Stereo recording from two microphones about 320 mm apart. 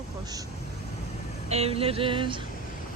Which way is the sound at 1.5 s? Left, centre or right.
Centre.